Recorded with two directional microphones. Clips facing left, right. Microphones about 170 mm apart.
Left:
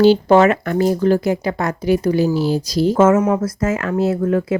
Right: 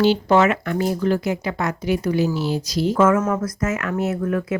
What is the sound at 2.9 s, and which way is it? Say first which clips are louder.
Speech: left 4 dB; 25° left (ahead or behind).